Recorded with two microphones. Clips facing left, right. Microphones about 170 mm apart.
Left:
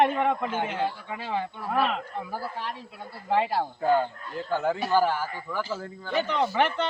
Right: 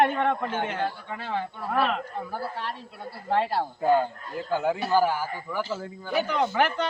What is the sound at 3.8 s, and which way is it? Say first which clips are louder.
A man's voice: right 2 dB; 15° right (ahead or behind).